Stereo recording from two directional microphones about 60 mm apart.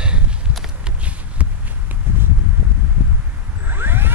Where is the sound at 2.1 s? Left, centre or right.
Right.